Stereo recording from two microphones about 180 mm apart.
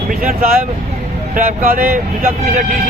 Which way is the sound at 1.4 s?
50° right (ahead or behind).